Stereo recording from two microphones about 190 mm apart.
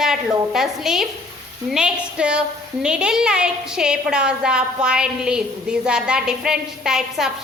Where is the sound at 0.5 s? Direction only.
Centre (ahead or behind).